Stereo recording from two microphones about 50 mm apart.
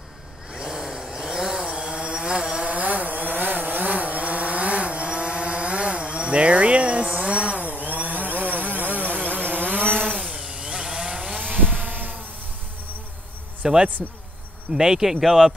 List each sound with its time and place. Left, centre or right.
0.6 s vehicle: centre
7.6 s chainsaw: right
10.2 s chainsaw: centre
11.3 s a sound: right
13.6 s a sound: centre
14.0 s speech: centre